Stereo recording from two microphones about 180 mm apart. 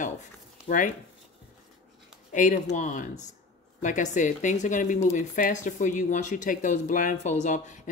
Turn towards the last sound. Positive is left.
turn(degrees=40)  # may be behind; listen again after turning